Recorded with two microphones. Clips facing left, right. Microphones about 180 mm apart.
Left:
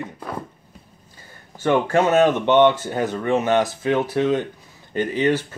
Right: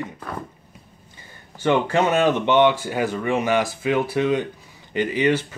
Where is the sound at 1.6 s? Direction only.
20° right (ahead or behind).